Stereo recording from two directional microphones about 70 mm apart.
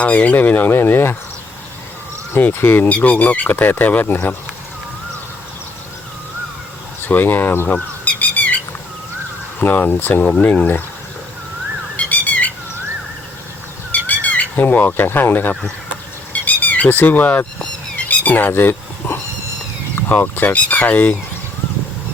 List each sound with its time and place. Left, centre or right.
0.0 s speech: left
2.3 s speech: left
7.0 s speech: left
8.0 s bird: left
9.6 s speech: left
11.9 s a sound: left
13.9 s squawk: left
15.0 s speech: left
16.3 s squeak: left
17.9 s a sound: left
20.1 s speech: left